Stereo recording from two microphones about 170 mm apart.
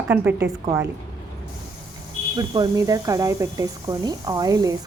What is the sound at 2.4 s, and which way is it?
Speech, 25° right (ahead or behind).